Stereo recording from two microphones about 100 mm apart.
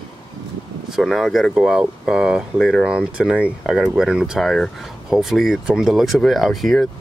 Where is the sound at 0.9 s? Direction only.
Centre (ahead or behind).